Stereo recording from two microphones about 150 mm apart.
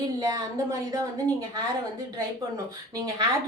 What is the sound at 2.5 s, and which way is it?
Speech, 25° right (ahead or behind).